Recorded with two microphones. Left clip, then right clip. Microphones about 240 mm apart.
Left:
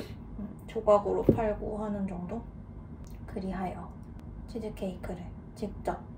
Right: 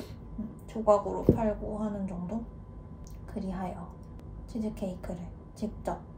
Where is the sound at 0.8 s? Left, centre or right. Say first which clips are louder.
Left 1 dB; centre.